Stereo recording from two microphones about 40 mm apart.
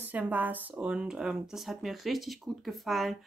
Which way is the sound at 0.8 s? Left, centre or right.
Right.